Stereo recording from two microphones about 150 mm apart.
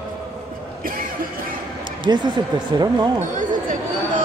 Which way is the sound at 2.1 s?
25° right (ahead or behind).